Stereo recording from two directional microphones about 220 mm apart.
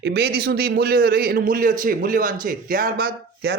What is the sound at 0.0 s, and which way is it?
A man's voice, 45° right (ahead or behind).